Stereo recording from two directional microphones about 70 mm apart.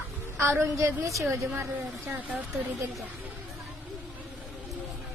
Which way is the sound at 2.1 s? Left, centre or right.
Right.